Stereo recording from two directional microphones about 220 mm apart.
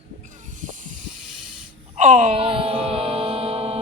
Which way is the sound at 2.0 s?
30° right (ahead or behind).